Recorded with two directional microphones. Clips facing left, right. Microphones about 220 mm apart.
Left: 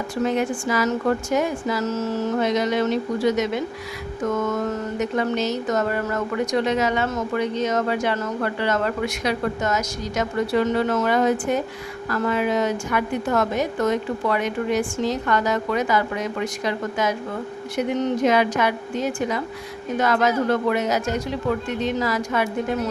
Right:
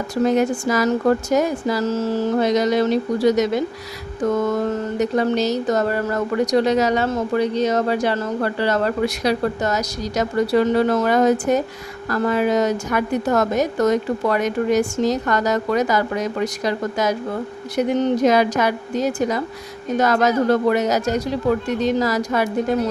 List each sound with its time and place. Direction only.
0.3 s speech: 40° right (ahead or behind)